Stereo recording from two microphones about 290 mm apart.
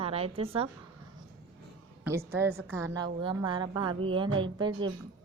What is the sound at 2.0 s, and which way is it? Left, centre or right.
Speech, centre.